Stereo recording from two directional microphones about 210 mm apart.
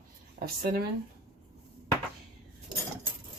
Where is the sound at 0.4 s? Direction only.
45° right (ahead or behind).